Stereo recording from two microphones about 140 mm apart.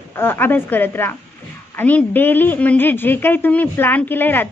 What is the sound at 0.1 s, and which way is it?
A woman's voice, 15° left (ahead or behind).